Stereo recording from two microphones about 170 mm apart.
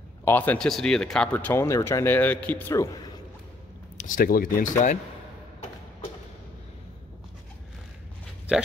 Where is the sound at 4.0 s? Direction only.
55° left (ahead or behind).